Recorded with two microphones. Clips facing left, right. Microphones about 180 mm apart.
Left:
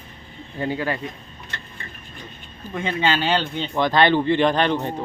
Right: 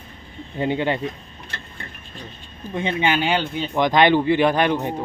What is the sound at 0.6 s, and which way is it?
Speech, 25° right (ahead or behind).